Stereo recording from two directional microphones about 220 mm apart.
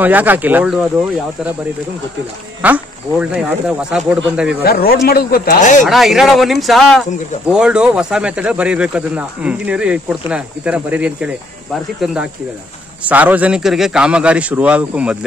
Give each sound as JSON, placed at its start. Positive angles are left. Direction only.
{"t": 0.0, "sound": "speech", "side_deg": -10}
{"t": 2.6, "sound": "speech", "side_deg": -5}
{"t": 4.6, "sound": "speech", "side_deg": 45}
{"t": 5.9, "sound": "speech", "side_deg": 0}